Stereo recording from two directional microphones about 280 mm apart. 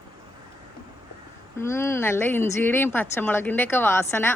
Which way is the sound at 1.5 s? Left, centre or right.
Centre.